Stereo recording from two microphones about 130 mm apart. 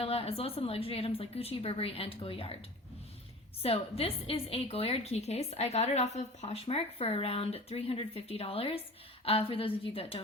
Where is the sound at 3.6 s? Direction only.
50° left (ahead or behind).